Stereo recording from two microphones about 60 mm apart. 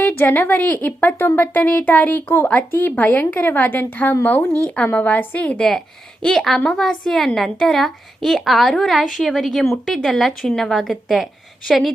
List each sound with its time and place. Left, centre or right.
0.0 s a woman's voice: left
5.5 s a woman's voice: centre